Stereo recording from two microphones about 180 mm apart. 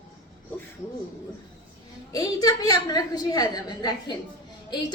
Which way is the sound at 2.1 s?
20° left (ahead or behind).